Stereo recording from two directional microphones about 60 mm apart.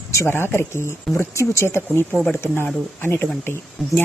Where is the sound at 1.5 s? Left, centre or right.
Left.